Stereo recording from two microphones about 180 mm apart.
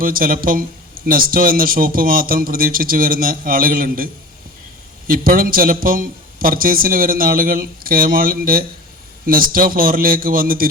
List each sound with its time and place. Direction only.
0.0 s speech: 50° right (ahead or behind)